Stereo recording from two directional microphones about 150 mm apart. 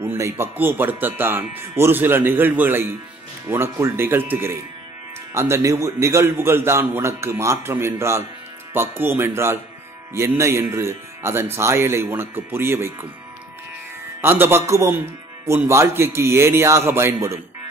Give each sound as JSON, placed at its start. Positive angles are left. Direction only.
{"t": 0.0, "sound": "a man's voice", "side_deg": -15}
{"t": 14.2, "sound": "a man's voice", "side_deg": -15}